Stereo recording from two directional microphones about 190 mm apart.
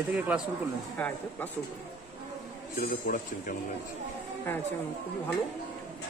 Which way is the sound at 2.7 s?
45° left (ahead or behind).